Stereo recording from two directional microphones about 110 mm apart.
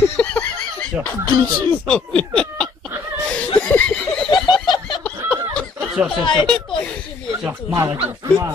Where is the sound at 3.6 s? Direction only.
10° left (ahead or behind).